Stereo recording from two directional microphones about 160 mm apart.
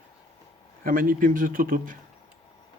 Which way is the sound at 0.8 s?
65° right (ahead or behind).